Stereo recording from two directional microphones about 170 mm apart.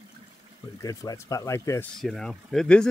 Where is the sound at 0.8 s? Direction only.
20° left (ahead or behind).